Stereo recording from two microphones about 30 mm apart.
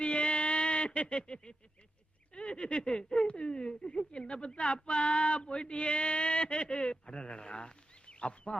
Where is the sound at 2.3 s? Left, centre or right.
Left.